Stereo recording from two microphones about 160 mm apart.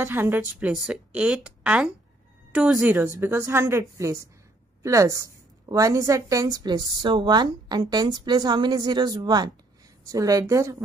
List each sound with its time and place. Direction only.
0.0 s a woman's voice: 15° right (ahead or behind)